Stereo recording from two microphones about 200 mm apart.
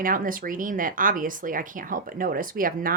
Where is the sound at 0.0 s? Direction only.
45° right (ahead or behind).